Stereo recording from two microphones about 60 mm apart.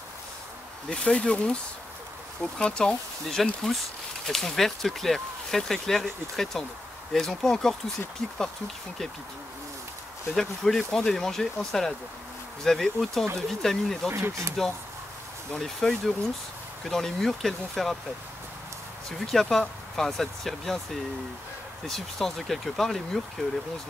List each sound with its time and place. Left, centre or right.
0.8 s speech: centre
10.3 s speech: centre
14.1 s speech: right
15.6 s speech: centre
19.1 s speech: centre